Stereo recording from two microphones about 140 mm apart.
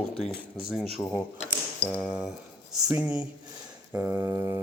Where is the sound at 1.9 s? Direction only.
5° right (ahead or behind).